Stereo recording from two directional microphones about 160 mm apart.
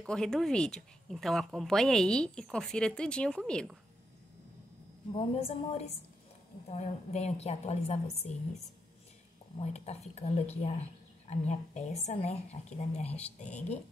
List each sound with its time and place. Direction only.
0.0 s speech: 5° left (ahead or behind)
5.1 s a woman's voice: 40° left (ahead or behind)
9.6 s a woman's voice: 40° left (ahead or behind)